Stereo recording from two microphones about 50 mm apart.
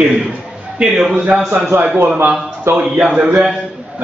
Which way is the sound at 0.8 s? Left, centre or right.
Centre.